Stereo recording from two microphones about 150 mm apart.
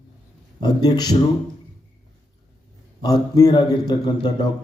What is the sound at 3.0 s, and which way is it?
A man's voice, 25° left (ahead or behind).